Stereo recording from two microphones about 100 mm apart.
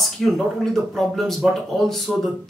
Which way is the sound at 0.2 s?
5° left (ahead or behind).